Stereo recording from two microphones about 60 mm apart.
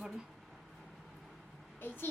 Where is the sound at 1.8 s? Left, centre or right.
Left.